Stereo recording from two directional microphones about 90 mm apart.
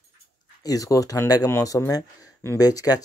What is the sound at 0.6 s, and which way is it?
A man's voice, 40° left (ahead or behind).